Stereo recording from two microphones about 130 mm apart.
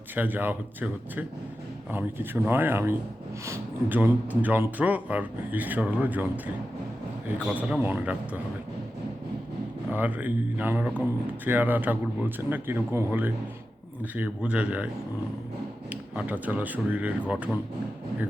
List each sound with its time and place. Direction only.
0.1 s speech: 15° right (ahead or behind)
7.4 s speech: 10° right (ahead or behind)
9.9 s speech: 15° right (ahead or behind)
15.9 s speech: 10° right (ahead or behind)